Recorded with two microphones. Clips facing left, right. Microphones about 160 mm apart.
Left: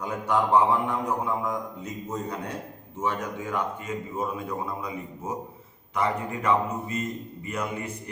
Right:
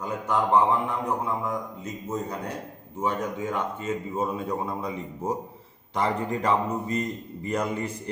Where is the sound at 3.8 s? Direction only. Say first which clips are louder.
Right 3 dB; 25° right (ahead or behind).